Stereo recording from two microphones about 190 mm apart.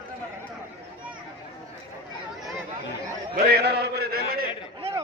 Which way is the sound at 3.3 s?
55° right (ahead or behind).